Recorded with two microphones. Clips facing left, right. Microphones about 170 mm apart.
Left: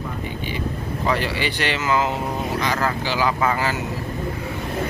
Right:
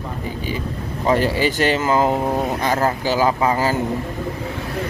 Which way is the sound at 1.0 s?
40° right (ahead or behind).